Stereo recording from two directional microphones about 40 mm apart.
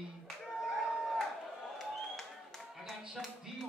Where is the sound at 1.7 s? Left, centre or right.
Centre.